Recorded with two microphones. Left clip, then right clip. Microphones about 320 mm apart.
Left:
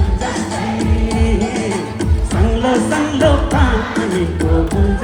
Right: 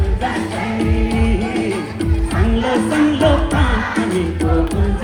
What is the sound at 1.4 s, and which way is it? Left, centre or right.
Music, left.